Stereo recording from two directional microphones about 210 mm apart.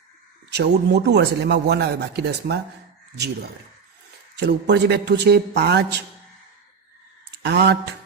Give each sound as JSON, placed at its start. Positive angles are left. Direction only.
{"t": 0.5, "sound": "speech", "side_deg": -50}
{"t": 4.4, "sound": "speech", "side_deg": -55}
{"t": 7.3, "sound": "a sound", "side_deg": -50}